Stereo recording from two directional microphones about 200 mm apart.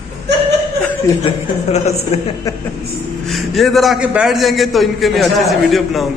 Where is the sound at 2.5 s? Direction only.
15° left (ahead or behind).